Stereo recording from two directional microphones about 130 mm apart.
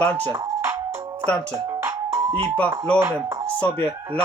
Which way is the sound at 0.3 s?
20° right (ahead or behind).